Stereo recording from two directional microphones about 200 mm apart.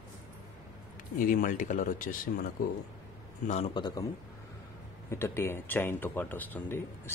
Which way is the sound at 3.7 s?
20° left (ahead or behind).